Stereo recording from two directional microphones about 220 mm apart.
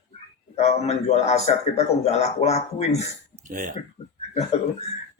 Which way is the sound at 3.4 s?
35° right (ahead or behind).